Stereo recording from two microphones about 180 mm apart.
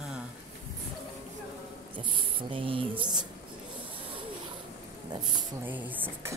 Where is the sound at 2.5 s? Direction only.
30° right (ahead or behind).